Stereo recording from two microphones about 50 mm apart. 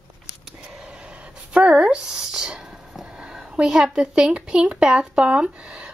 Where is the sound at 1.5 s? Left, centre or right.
Centre.